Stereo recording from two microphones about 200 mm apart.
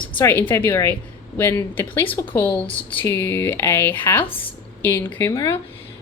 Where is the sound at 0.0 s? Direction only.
10° left (ahead or behind).